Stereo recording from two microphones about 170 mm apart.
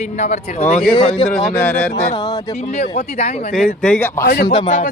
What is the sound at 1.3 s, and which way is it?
Speech, centre (ahead or behind).